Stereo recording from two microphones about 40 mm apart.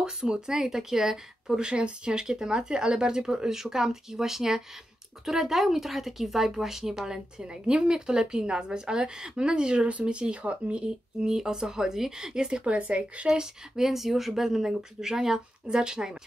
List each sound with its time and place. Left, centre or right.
0.0 s speech: centre
1.7 s speech: right
11.2 s speech: centre; by 13.3 s right
13.3 s speech: centre